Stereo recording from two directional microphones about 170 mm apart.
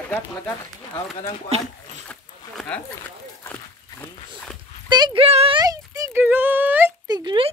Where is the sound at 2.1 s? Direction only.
10° left (ahead or behind).